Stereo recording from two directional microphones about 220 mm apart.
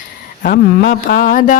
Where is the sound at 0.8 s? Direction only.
50° left (ahead or behind).